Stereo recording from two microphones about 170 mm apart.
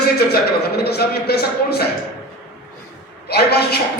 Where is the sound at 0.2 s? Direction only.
70° left (ahead or behind).